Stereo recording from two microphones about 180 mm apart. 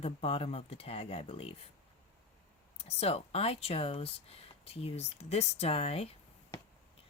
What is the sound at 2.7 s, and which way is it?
Speech, 35° left (ahead or behind).